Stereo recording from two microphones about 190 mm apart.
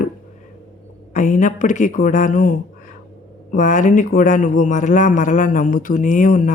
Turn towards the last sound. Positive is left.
turn(degrees=45)  # may be behind; listen again after turning